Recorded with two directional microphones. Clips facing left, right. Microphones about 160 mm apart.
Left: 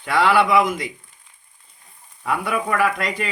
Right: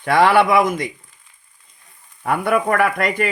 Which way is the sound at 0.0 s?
60° right (ahead or behind).